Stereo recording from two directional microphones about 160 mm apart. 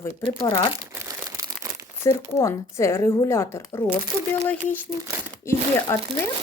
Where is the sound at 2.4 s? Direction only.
15° left (ahead or behind).